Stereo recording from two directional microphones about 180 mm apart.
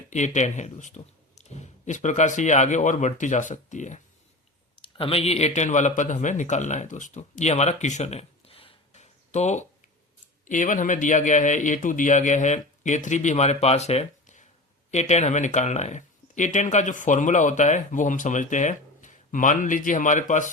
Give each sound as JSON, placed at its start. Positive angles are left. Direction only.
{"t": 0.1, "sound": "speech", "side_deg": 40}
{"t": 4.8, "sound": "a man's voice", "side_deg": 30}